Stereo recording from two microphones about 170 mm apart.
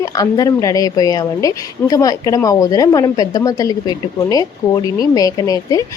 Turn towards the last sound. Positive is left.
turn(degrees=20)  # may be behind; listen again after turning